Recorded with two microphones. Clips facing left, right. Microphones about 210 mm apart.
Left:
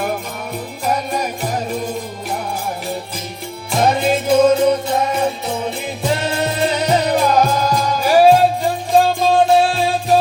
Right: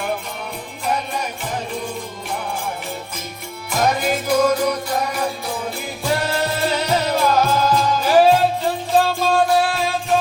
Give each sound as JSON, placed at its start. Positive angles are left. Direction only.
{"t": 3.7, "sound": "music", "side_deg": 30}
{"t": 9.5, "sound": "music", "side_deg": 25}